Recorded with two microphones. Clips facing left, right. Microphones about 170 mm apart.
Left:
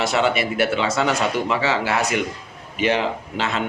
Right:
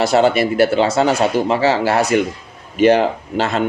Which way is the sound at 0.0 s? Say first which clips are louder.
Right 6 dB; 35° right (ahead or behind).